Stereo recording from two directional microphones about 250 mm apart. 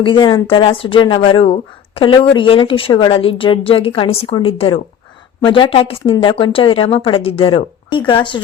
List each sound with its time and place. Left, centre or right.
0.0 s a woman's voice: centre